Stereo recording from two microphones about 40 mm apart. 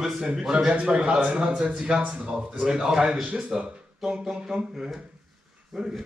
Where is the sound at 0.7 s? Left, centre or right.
Right.